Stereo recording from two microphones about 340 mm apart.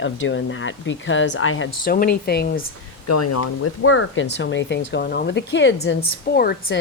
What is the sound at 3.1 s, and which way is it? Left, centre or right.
Speech, left.